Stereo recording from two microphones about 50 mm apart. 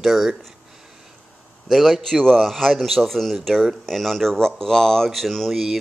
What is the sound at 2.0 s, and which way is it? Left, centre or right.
Speech, centre.